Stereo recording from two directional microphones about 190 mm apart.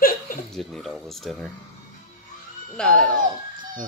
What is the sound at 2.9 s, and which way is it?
Speech, 45° right (ahead or behind).